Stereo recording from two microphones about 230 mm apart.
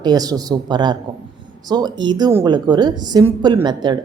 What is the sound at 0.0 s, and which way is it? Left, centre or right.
Speech, centre.